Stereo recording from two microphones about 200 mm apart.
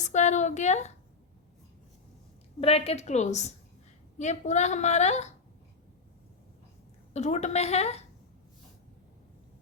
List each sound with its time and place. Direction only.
0.0 s a woman's voice: 35° left (ahead or behind)
2.6 s a woman's voice: 30° left (ahead or behind)
7.1 s a woman's voice: 35° left (ahead or behind)